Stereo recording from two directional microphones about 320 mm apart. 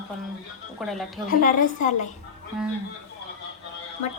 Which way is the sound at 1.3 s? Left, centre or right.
Left.